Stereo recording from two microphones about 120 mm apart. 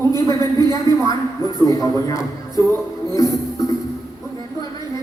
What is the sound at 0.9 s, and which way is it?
Speech, 35° right (ahead or behind).